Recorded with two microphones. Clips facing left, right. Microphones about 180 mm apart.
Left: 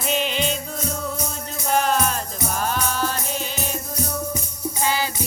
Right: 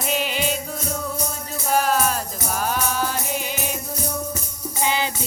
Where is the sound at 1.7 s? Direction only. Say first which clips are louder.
Even; 5° right (ahead or behind).